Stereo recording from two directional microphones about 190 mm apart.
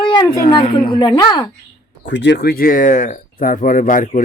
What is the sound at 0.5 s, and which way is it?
Speech, 25° left (ahead or behind).